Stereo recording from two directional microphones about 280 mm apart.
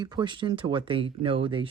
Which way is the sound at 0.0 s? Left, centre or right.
Centre.